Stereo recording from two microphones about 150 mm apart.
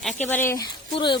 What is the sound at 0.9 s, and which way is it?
Speech, 35° left (ahead or behind).